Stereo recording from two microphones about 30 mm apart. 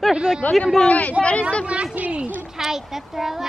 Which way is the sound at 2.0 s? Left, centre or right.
Right.